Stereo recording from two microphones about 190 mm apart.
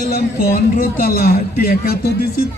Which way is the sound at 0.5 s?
50° left (ahead or behind).